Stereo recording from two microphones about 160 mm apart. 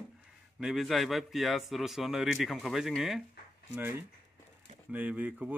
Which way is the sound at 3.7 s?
15° right (ahead or behind).